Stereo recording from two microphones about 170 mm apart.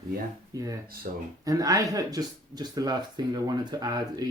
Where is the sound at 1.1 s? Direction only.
60° right (ahead or behind).